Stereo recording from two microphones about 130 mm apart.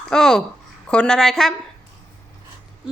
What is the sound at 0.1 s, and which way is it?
A child's voice, 5° left (ahead or behind).